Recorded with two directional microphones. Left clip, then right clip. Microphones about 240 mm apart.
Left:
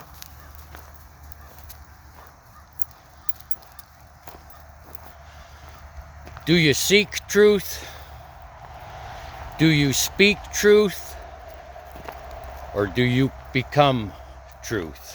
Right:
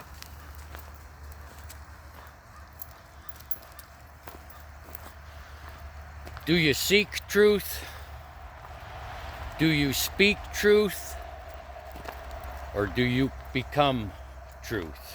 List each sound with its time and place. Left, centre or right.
6.2 s speech: left
9.6 s speech: left
12.1 s clip-clop: centre
12.7 s speech: centre